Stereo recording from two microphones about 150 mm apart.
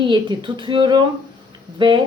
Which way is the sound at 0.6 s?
30° right (ahead or behind).